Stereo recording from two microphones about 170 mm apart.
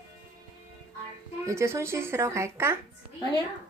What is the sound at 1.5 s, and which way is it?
Speech, 15° right (ahead or behind).